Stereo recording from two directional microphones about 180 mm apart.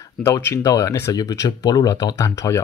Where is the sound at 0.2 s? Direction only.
15° left (ahead or behind).